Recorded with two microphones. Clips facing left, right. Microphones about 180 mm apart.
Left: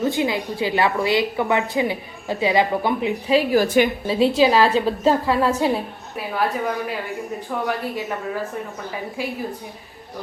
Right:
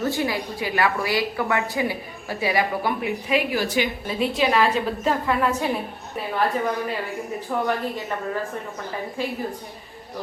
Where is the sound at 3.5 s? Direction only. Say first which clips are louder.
Left 7 dB; 50° left (ahead or behind).